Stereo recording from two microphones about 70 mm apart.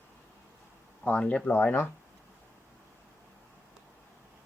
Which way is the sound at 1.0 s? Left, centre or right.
Left.